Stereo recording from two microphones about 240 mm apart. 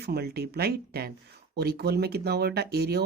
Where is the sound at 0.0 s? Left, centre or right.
Right.